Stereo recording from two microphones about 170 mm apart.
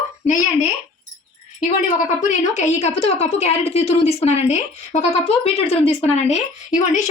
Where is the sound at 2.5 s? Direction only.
40° left (ahead or behind).